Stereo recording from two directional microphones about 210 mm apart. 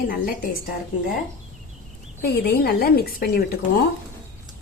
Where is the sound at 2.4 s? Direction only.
45° left (ahead or behind).